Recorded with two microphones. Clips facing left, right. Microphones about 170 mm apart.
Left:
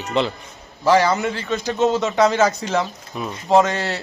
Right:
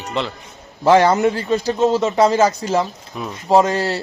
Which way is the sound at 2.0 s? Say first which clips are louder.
Right 2 dB; 30° right (ahead or behind).